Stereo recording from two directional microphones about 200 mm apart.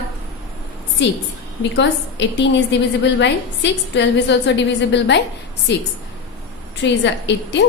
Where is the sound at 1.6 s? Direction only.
60° left (ahead or behind).